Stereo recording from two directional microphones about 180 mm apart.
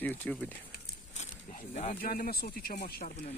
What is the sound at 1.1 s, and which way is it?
Speech, 40° left (ahead or behind).